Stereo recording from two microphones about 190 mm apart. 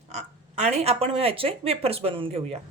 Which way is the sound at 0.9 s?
30° right (ahead or behind).